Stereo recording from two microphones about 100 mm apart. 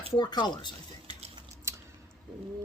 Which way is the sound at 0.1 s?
45° left (ahead or behind).